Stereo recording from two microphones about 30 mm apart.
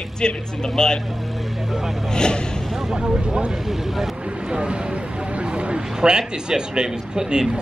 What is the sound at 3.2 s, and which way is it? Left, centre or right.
Speech, right.